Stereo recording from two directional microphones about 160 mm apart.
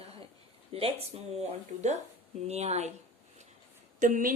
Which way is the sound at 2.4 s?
45° right (ahead or behind).